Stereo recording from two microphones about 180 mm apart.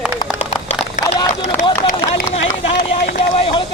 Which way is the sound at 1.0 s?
45° left (ahead or behind).